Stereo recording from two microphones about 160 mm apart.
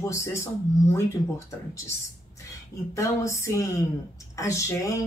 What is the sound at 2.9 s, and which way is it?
Speech, 20° left (ahead or behind).